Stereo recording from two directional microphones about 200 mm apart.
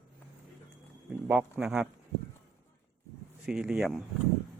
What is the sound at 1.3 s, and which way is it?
Speech, 5° right (ahead or behind).